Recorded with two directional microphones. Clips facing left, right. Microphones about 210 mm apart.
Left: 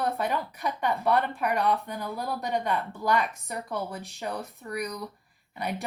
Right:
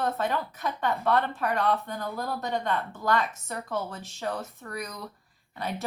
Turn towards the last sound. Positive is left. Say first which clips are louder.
# left 1 dB
turn(degrees=15)  # may be behind; listen again after turning